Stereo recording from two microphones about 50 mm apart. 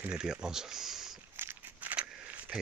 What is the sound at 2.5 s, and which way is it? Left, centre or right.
Speech, centre.